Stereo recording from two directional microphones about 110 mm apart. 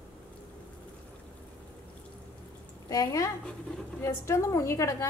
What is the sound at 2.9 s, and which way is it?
A woman's voice, 35° left (ahead or behind).